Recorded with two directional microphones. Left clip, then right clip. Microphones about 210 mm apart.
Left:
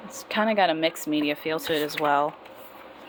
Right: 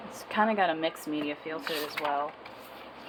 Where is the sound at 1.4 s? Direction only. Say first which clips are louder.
Left 7 dB; 45° left (ahead or behind).